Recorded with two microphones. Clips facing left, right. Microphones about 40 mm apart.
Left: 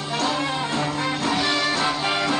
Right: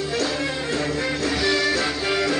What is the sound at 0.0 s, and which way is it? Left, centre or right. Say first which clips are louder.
Music: even; centre.